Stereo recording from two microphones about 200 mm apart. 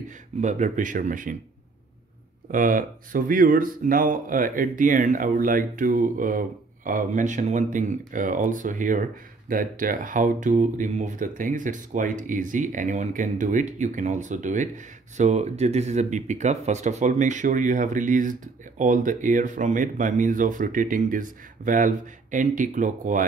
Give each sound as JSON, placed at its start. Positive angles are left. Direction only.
{"t": 0.4, "sound": "speech", "side_deg": -40}
{"t": 2.5, "sound": "speech", "side_deg": -40}